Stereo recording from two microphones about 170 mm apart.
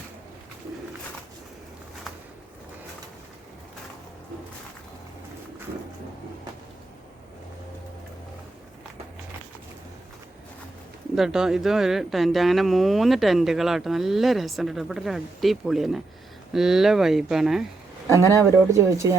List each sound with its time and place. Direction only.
11.1 s speech: 5° right (ahead or behind)
18.3 s speech: 15° right (ahead or behind)